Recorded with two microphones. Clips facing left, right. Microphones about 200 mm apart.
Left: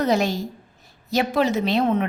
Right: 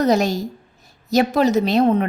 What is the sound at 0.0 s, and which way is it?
A woman's voice, 40° right (ahead or behind).